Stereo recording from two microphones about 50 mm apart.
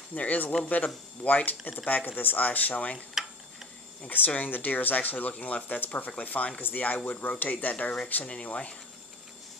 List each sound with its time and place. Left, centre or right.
0.1 s speech: left
1.6 s speech: centre
1.9 s speech: left
4.0 s speech: left